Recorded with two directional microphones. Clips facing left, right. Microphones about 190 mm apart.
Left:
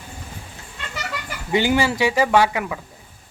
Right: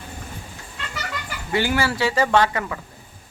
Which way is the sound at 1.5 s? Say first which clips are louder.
Left 3 dB; 20° left (ahead or behind).